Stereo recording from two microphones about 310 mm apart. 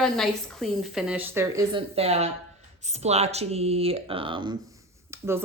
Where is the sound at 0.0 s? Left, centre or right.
Centre.